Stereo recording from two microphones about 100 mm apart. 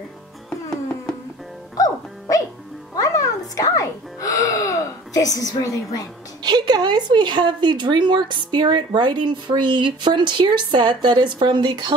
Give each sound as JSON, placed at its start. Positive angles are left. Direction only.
{"t": 1.8, "sound": "music", "side_deg": 35}
{"t": 6.4, "sound": "speech", "side_deg": -45}